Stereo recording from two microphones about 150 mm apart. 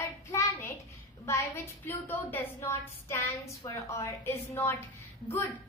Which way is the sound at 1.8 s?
15° left (ahead or behind).